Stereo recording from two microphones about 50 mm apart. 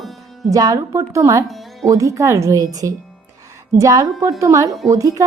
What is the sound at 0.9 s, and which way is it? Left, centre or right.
Speech, right.